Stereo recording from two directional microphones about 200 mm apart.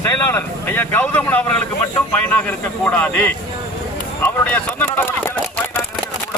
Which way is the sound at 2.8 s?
5° left (ahead or behind).